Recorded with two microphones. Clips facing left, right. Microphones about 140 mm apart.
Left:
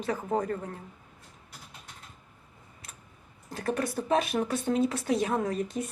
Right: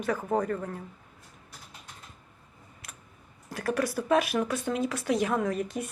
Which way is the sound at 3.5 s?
25° left (ahead or behind).